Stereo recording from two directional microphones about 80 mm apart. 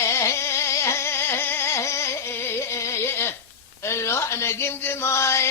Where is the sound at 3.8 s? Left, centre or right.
Left.